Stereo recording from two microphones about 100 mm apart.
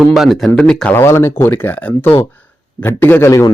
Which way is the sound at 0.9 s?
25° left (ahead or behind).